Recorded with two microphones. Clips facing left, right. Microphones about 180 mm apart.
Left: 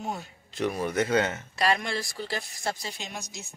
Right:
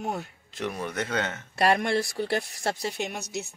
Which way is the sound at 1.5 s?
60° right (ahead or behind).